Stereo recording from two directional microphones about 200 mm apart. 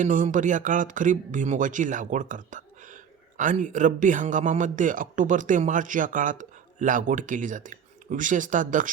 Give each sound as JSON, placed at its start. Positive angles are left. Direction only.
{"t": 0.0, "sound": "a man's voice", "side_deg": -40}